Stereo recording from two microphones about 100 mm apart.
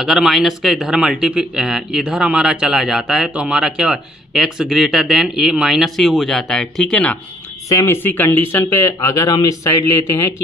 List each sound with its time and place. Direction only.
0.0 s speech: centre (ahead or behind)
7.7 s speech: 25° left (ahead or behind)